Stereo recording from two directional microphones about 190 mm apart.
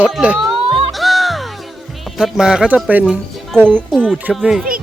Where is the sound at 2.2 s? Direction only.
5° right (ahead or behind).